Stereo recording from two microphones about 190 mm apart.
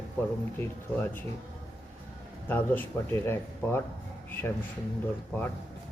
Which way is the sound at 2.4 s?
10° left (ahead or behind).